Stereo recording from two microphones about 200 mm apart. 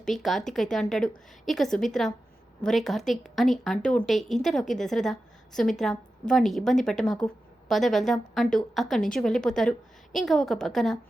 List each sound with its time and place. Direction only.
0.0 s a woman's voice: centre (ahead or behind)